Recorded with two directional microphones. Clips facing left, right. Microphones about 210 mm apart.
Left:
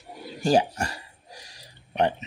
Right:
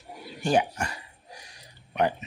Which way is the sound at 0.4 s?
40° left (ahead or behind).